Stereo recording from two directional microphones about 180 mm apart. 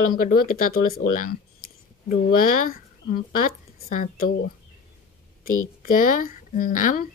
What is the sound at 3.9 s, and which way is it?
Speech, 50° left (ahead or behind).